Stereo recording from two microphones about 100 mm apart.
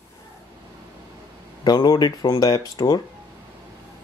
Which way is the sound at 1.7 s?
40° left (ahead or behind).